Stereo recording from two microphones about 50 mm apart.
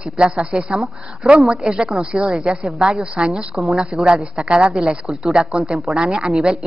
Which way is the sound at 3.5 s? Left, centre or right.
Centre.